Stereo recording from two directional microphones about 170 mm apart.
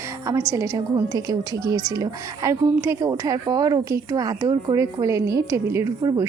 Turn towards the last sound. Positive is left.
turn(degrees=-20)  # may be behind; listen again after turning